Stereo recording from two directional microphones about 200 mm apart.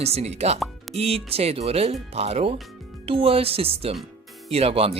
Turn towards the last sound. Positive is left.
turn(degrees=-30)  # may be behind; listen again after turning